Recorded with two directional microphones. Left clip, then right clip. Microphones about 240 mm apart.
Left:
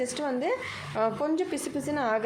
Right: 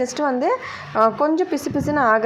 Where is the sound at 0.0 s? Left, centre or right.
Centre.